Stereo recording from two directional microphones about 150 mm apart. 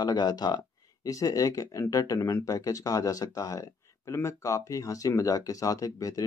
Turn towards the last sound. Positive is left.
turn(degrees=25)  # may be behind; listen again after turning